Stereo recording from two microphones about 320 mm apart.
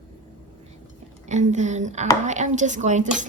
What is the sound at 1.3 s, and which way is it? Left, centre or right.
A woman's voice, right.